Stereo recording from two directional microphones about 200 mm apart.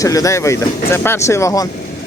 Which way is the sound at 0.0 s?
15° left (ahead or behind).